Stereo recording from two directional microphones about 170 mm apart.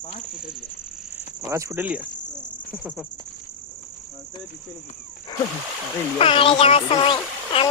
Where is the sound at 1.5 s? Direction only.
15° right (ahead or behind).